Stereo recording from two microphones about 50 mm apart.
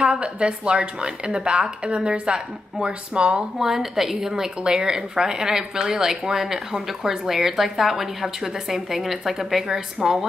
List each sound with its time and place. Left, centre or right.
0.0 s a woman's voice: centre
3.5 s speech: centre